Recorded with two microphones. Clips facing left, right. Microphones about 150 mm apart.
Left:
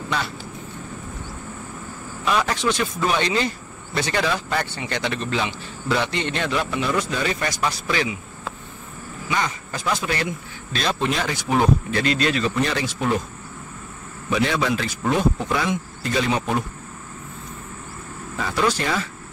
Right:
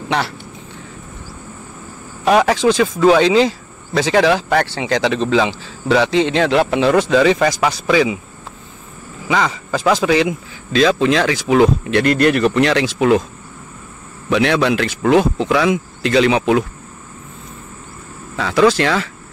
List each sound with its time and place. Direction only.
2.2 s speech: 75° right (ahead or behind)
9.3 s speech: 90° right
14.3 s speech: 75° right (ahead or behind); by 16.6 s 90° right
18.4 s speech: 90° right